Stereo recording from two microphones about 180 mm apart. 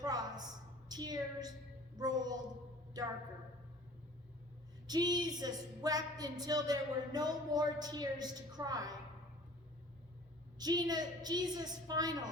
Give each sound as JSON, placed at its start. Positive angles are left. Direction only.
{"t": 0.0, "sound": "a sound", "side_deg": -20}
{"t": 0.9, "sound": "a woman's voice", "side_deg": -20}
{"t": 4.9, "sound": "a woman's voice", "side_deg": -25}
{"t": 10.6, "sound": "a woman's voice", "side_deg": -20}